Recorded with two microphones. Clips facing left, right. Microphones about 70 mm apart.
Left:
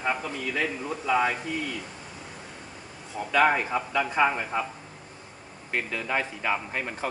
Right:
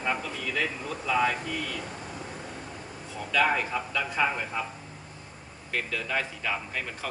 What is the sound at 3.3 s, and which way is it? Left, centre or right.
Speech, left.